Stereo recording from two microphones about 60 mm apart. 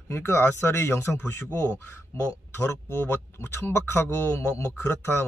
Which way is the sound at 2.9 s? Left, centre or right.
Left.